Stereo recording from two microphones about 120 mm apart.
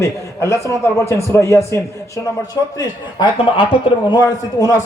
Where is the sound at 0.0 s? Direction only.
25° left (ahead or behind).